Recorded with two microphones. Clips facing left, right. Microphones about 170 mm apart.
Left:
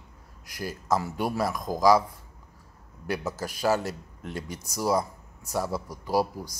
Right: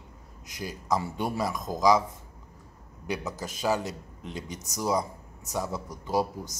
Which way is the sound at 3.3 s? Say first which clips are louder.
Left 3 dB; 20° right (ahead or behind).